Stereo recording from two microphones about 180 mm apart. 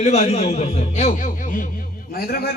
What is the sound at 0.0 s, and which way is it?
A man's voice, 35° left (ahead or behind).